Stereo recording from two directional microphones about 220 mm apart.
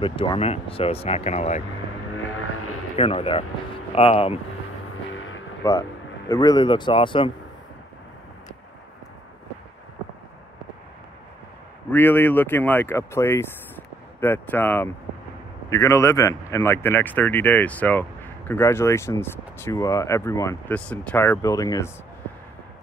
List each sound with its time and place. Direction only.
0.0 s speech: 25° left (ahead or behind)
3.0 s speech: 25° left (ahead or behind)
5.1 s vehicle: 60° left (ahead or behind)
5.6 s speech: 15° left (ahead or behind)
11.9 s speech: 10° left (ahead or behind)